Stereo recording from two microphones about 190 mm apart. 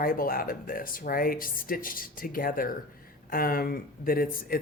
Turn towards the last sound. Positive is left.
turn(degrees=50)  # may be behind; listen again after turning